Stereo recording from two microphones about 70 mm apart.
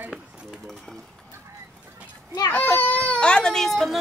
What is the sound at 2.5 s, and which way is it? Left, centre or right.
A child's voice, left.